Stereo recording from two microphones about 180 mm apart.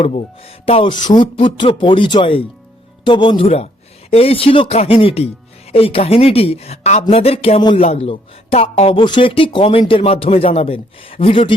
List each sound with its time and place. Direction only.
0.0 s speech: 35° left (ahead or behind)